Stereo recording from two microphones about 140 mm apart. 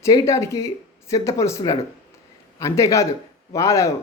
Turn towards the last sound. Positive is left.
turn(degrees=20)  # may be behind; listen again after turning